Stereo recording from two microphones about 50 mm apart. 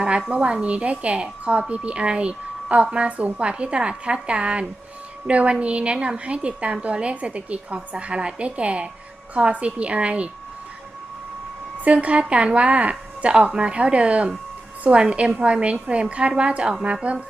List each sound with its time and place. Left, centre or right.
0.0 s a woman's voice: centre
11.9 s a woman's voice: right